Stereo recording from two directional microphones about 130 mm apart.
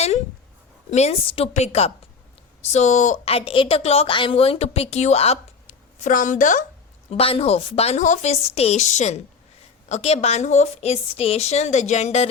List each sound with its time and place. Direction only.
0.9 s a woman's voice: 55° left (ahead or behind)
3.2 s a woman's voice: 45° left (ahead or behind); by 6.7 s 85° left
7.1 s a woman's voice: 45° left (ahead or behind)